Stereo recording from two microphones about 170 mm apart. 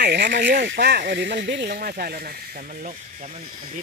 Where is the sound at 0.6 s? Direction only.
80° right.